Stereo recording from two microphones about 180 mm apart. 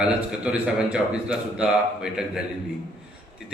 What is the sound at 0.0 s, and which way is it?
A man's voice, 5° right (ahead or behind).